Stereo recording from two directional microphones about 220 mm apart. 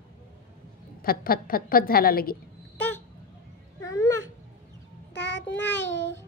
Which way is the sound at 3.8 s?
15° left (ahead or behind).